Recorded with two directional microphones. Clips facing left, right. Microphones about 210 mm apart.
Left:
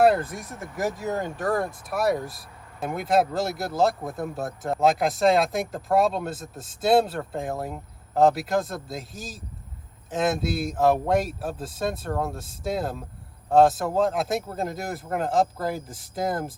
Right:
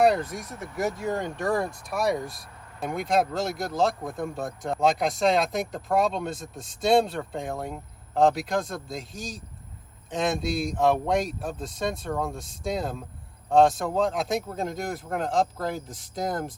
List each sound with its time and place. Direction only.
0.0 s speech: 5° left (ahead or behind)
0.3 s speech: 50° left (ahead or behind)
0.8 s speech: 5° left (ahead or behind)